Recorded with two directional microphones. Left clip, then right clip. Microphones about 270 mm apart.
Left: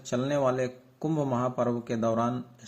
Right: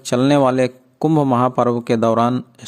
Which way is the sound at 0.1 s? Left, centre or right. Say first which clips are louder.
Right 12 dB; right.